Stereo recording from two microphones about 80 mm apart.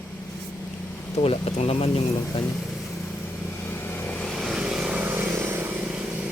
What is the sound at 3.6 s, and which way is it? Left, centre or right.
Vehicle, left.